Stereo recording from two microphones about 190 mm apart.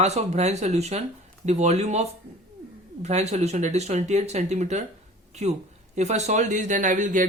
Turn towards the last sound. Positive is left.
turn(degrees=-40)  # may be behind; listen again after turning